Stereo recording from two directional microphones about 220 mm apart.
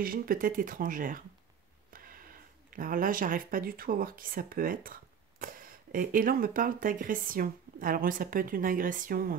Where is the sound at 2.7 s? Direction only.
40° right (ahead or behind).